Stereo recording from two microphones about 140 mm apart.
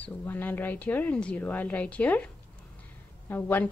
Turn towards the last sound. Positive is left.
turn(degrees=15)  # may be behind; listen again after turning